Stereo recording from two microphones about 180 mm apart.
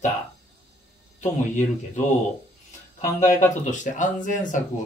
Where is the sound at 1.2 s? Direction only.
40° left (ahead or behind).